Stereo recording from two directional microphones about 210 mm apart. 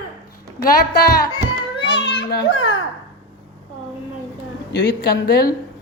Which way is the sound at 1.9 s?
60° left (ahead or behind).